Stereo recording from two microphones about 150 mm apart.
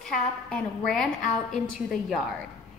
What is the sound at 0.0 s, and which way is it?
A woman's voice, 5° left (ahead or behind).